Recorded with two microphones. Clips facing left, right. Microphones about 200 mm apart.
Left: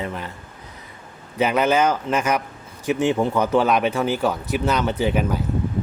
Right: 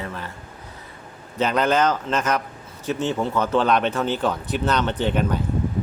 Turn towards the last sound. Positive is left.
turn(degrees=5)  # may be behind; listen again after turning